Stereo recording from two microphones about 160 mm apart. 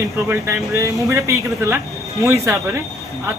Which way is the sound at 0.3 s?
15° right (ahead or behind).